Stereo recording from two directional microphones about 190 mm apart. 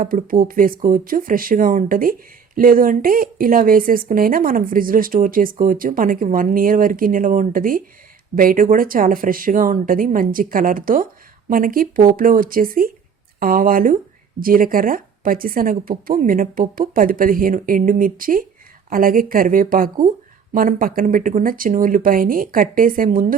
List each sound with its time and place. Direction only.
0.0 s speech: 45° right (ahead or behind)